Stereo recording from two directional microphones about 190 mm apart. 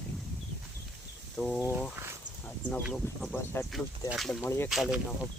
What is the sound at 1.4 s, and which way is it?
Speech, 5° left (ahead or behind).